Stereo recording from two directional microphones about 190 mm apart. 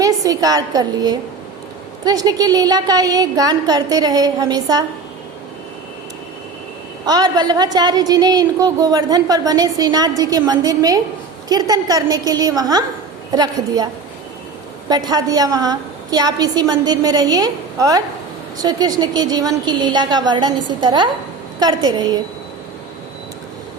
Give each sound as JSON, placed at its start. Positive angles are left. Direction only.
{"t": 0.0, "sound": "a woman's voice", "side_deg": -20}
{"t": 7.0, "sound": "a woman's voice", "side_deg": -20}
{"t": 14.8, "sound": "a woman's voice", "side_deg": -20}